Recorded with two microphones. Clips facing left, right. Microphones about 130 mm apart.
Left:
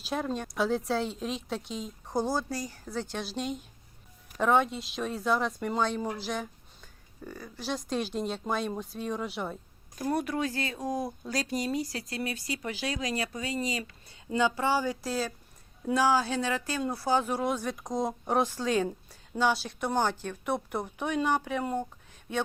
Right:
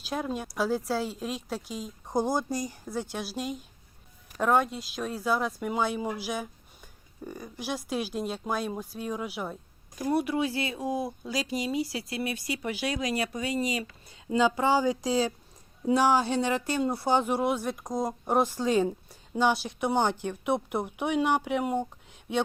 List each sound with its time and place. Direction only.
0.0 s speech: centre (ahead or behind)
2.0 s speech: 15° right (ahead or behind)